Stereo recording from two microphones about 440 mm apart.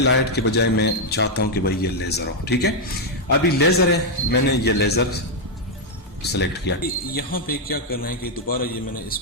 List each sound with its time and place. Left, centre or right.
0.0 s speech: left
6.3 s speech: left